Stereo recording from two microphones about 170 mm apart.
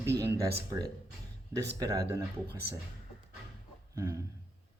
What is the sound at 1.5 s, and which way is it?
Speech, 15° right (ahead or behind).